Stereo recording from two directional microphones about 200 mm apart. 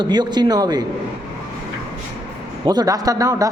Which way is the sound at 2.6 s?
20° right (ahead or behind).